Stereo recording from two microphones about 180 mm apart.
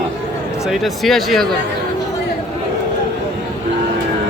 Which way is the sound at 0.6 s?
Centre (ahead or behind).